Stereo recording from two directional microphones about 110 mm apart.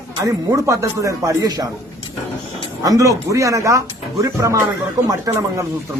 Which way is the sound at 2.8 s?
30° right (ahead or behind).